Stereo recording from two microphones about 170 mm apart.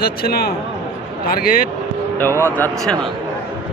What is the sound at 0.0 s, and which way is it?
A man's voice, 65° left (ahead or behind).